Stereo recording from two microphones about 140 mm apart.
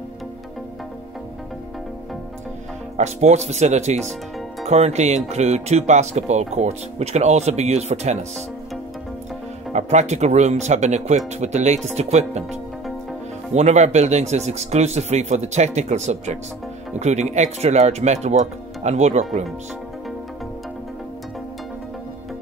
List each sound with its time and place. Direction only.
3.0 s speech: 55° right (ahead or behind)
9.7 s speech: 55° right (ahead or behind)
13.5 s speech: 50° right (ahead or behind)